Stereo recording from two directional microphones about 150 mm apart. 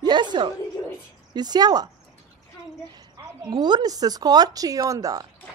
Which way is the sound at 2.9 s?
25° right (ahead or behind).